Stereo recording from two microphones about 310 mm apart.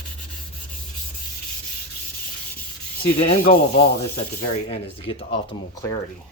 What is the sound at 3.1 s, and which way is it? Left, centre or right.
Speech, left.